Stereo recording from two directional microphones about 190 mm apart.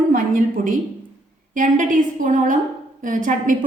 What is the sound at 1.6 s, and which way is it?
A woman's voice, 45° right (ahead or behind).